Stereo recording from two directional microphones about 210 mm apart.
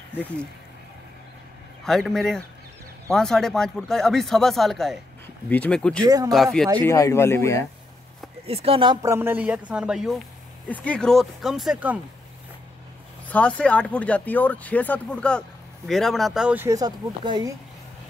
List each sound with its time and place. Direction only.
0.1 s speech: 5° left (ahead or behind)
1.9 s speech: centre (ahead or behind)
6.0 s speech: 15° right (ahead or behind)
6.3 s speech: centre (ahead or behind)
6.8 s speech: 15° left (ahead or behind)
8.5 s speech: 25° right (ahead or behind); by 12.0 s 5° right (ahead or behind)
13.3 s speech: 5° left (ahead or behind); by 17.5 s 20° right (ahead or behind)